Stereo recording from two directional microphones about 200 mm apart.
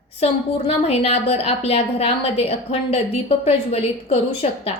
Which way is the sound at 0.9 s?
30° left (ahead or behind).